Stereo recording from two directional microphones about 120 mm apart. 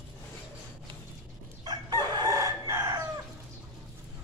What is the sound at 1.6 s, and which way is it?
Chicken, 35° right (ahead or behind).